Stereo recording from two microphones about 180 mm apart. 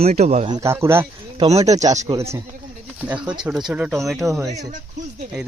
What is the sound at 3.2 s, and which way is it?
Speech, 25° right (ahead or behind).